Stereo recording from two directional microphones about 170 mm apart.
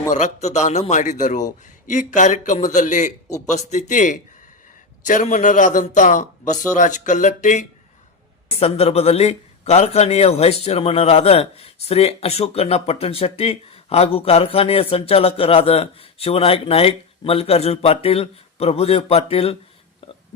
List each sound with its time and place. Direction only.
0.1 s a man's voice: 45° left (ahead or behind)
8.4 s speech: 35° left (ahead or behind)